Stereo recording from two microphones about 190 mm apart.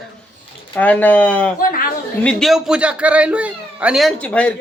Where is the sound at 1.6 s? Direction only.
50° left (ahead or behind).